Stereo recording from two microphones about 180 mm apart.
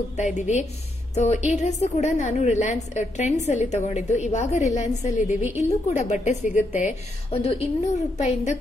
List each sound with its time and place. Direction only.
0.2 s a woman's voice: 40° left (ahead or behind)
5.3 s a woman's voice: 10° right (ahead or behind)
5.6 s a woman's voice: 40° left (ahead or behind)